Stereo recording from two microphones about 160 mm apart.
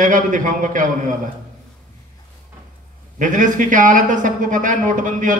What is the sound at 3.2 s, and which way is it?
A man's voice, 55° right (ahead or behind).